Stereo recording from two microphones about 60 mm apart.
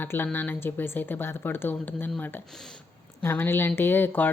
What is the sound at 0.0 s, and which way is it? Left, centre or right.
Speech, left.